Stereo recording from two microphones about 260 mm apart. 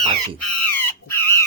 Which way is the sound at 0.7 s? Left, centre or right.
Centre.